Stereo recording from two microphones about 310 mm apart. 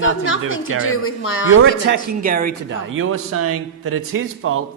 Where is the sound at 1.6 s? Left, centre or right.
Right.